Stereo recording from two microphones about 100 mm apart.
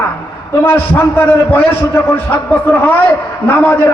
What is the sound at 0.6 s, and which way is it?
A man's voice, 20° left (ahead or behind).